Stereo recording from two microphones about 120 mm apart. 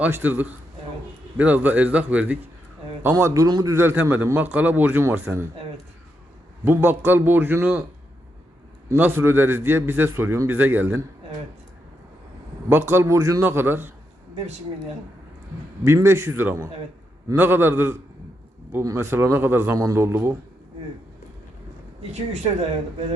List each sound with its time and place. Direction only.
0.0 s a man's voice: 15° right (ahead or behind); by 3.8 s 35° right (ahead or behind)
3.8 s a man's voice: 20° right (ahead or behind)
6.7 s a man's voice: 15° right (ahead or behind)
9.0 s a man's voice: 15° right (ahead or behind)
12.6 s a man's voice: 20° right (ahead or behind)
15.8 s a man's voice: 20° right (ahead or behind)